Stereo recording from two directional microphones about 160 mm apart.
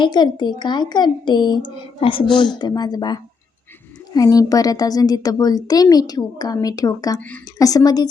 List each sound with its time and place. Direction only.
0.0 s a woman's voice: 25° left (ahead or behind)
7.2 s a woman's voice: 10° left (ahead or behind)
7.6 s speech: 20° left (ahead or behind)